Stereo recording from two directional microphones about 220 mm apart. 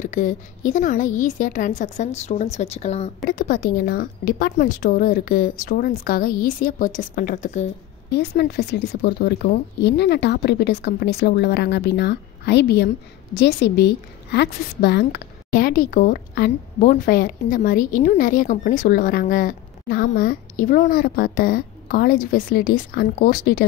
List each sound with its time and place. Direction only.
0.0 s a woman's voice: 35° left (ahead or behind)
3.3 s a woman's voice: 40° left (ahead or behind)
8.1 s a woman's voice: 50° left (ahead or behind)